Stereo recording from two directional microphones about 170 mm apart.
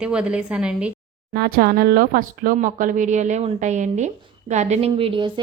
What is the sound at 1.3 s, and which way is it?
Speech, 60° right (ahead or behind).